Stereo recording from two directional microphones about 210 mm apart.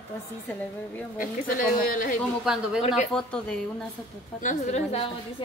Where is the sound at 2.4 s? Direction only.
5° right (ahead or behind).